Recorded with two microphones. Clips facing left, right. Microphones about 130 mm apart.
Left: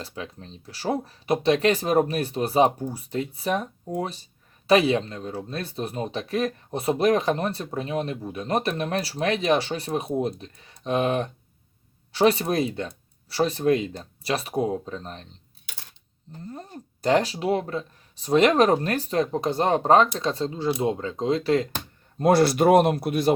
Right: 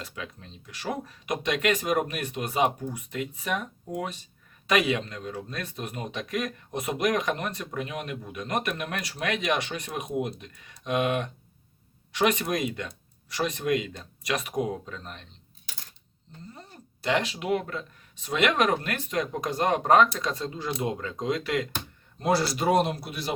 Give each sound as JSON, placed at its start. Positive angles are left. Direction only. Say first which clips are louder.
{"t": 0.0, "sound": "speech", "louder": "left 3 dB", "side_deg": 30}
{"t": 16.5, "sound": "speech", "louder": "left 11 dB", "side_deg": 45}
{"t": 22.2, "sound": "speech", "louder": "left 7 dB", "side_deg": 55}